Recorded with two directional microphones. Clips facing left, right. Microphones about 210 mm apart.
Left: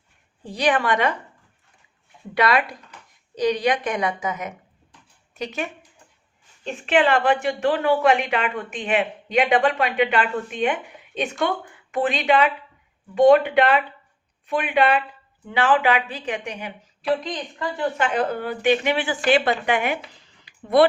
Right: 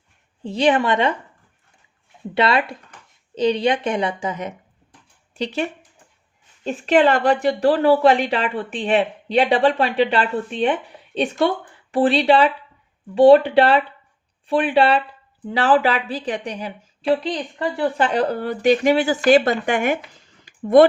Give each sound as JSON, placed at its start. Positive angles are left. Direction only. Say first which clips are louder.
{"t": 0.4, "sound": "a woman's voice", "louder": "right 4 dB", "side_deg": -25}
{"t": 2.3, "sound": "a woman's voice", "louder": "right 2 dB", "side_deg": -25}
{"t": 6.7, "sound": "a woman's voice", "louder": "right 4 dB", "side_deg": -40}